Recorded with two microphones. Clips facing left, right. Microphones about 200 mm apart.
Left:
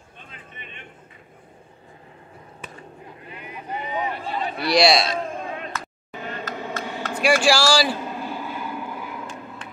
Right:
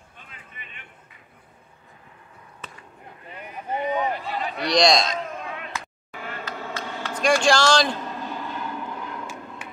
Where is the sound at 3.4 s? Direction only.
45° right (ahead or behind).